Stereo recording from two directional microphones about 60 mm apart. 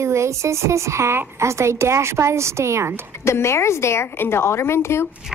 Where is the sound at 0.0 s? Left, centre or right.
Right.